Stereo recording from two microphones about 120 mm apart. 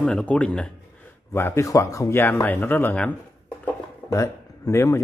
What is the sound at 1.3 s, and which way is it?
Speech, 20° left (ahead or behind).